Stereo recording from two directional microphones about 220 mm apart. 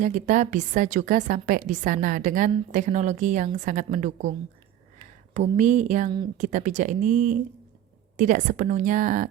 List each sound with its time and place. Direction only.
0.0 s a woman's voice: 35° right (ahead or behind)
5.3 s a woman's voice: 30° right (ahead or behind)